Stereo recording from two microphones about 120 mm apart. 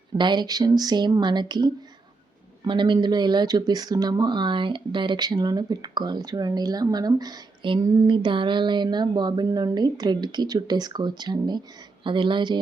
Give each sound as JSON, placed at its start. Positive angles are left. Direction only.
{"t": 0.2, "sound": "speech", "side_deg": -40}